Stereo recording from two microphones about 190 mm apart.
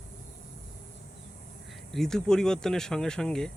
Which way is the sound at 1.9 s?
Centre (ahead or behind).